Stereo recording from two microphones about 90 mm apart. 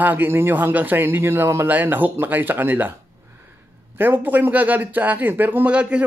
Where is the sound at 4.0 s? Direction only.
20° right (ahead or behind).